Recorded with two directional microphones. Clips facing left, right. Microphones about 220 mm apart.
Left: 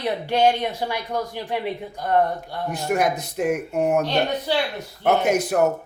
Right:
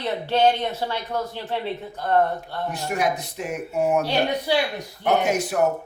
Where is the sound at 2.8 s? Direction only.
55° left (ahead or behind).